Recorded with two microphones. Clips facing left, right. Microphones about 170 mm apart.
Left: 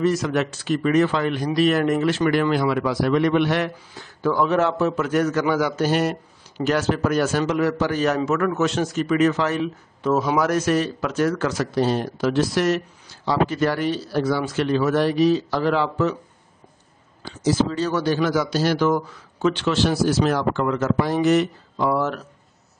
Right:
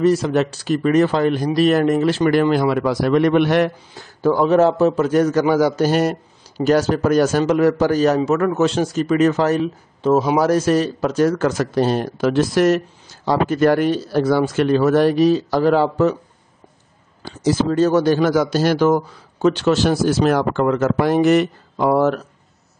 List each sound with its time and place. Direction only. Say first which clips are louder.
0.0 s speech: right 5 dB; 30° right (ahead or behind)
10.0 s a man's voice: right 5 dB; 25° right (ahead or behind); by 16.2 s 40° right (ahead or behind)
17.2 s speech: right 2 dB; 55° right (ahead or behind)